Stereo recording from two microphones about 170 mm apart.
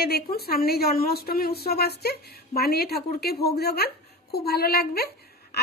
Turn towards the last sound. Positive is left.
turn(degrees=65)  # may be behind; listen again after turning